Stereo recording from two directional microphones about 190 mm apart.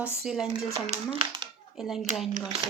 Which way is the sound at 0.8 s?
30° right (ahead or behind).